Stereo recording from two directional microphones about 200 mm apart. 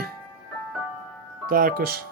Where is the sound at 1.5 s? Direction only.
45° right (ahead or behind).